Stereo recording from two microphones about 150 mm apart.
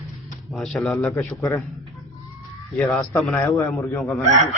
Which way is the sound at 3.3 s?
20° left (ahead or behind).